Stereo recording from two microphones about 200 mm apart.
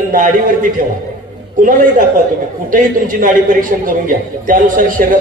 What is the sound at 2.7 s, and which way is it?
Speech, 45° right (ahead or behind).